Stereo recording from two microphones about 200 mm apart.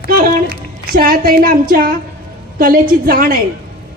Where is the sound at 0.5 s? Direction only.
45° right (ahead or behind).